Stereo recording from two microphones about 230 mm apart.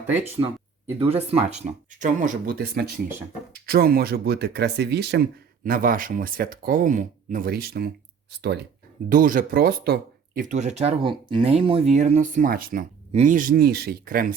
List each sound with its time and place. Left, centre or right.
0.9 s speech: right